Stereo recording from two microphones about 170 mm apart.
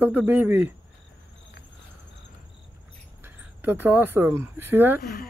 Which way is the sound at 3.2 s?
10° right (ahead or behind).